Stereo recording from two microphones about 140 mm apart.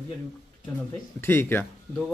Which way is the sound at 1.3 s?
15° left (ahead or behind).